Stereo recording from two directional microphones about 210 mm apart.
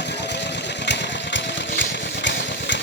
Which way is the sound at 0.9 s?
60° left (ahead or behind).